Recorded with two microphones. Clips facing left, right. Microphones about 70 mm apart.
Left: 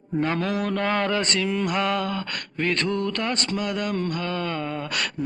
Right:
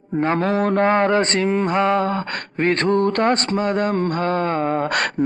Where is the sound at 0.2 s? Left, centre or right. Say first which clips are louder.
Right 6 dB; right.